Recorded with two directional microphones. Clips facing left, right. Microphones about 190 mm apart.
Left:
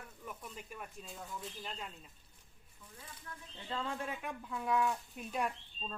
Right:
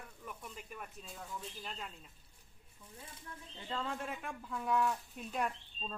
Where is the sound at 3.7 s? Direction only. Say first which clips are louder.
Left 1 dB; 5° left (ahead or behind).